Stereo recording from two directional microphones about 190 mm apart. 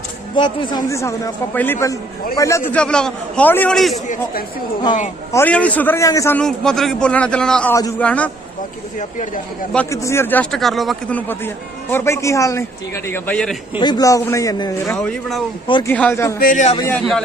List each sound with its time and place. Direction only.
0.3 s a man's voice: 25° left (ahead or behind); by 3.9 s 5° left (ahead or behind)
5.3 s a man's voice: 10° left (ahead or behind)
7.8 s a man's voice: 15° left (ahead or behind)
8.0 s a man's voice: 5° left (ahead or behind)
9.0 s speech: 40° left (ahead or behind)
9.7 s a man's voice: 15° left (ahead or behind)
11.3 s a man's voice: 10° left (ahead or behind)
13.7 s a man's voice: 25° left (ahead or behind)
14.9 s speech: 5° left (ahead or behind)
15.6 s speech: 25° left (ahead or behind)
15.9 s a man's voice: 10° left (ahead or behind)
16.4 s speech: 45° left (ahead or behind)
16.9 s speech: 5° left (ahead or behind)